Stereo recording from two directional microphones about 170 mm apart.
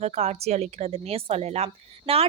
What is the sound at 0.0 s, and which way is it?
A woman's voice, 40° right (ahead or behind).